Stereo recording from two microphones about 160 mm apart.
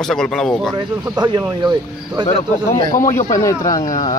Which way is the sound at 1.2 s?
25° right (ahead or behind).